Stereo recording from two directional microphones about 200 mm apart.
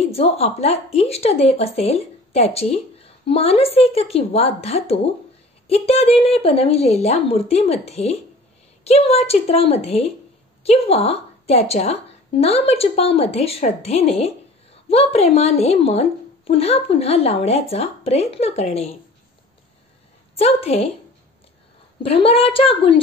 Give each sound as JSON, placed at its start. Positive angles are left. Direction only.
{"t": 0.0, "sound": "a woman's voice", "side_deg": 30}
{"t": 20.3, "sound": "a woman's voice", "side_deg": 30}
{"t": 22.0, "sound": "a woman's voice", "side_deg": 30}